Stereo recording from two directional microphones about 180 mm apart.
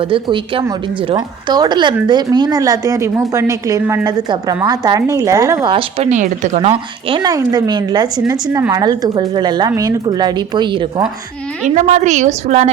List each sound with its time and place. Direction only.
0.1 s speech: 30° right (ahead or behind)
5.7 s speech: 40° right (ahead or behind)
11.6 s a woman's voice: 40° right (ahead or behind)